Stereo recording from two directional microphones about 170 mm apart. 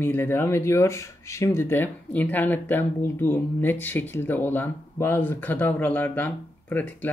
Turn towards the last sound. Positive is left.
turn(degrees=10)  # may be behind; listen again after turning